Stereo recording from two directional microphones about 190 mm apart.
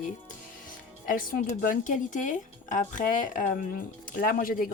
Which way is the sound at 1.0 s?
45° left (ahead or behind).